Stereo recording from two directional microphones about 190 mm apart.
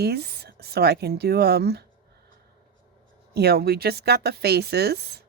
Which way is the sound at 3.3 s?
55° right (ahead or behind).